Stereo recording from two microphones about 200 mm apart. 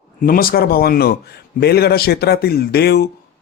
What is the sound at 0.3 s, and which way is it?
Speech, 45° left (ahead or behind).